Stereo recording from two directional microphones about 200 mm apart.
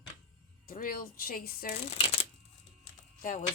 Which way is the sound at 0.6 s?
45° left (ahead or behind).